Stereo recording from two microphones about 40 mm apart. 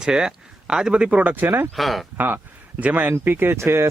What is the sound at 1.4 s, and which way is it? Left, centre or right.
Speech, right.